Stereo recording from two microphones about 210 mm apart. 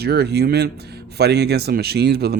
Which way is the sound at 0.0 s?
50° right (ahead or behind).